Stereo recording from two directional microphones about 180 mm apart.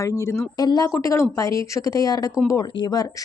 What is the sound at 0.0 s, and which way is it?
Speech, 15° left (ahead or behind).